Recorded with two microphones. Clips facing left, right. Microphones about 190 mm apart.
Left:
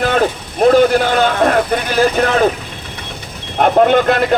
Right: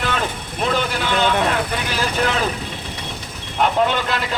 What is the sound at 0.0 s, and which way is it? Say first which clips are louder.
Speech: left 9 dB; 50° left (ahead or behind).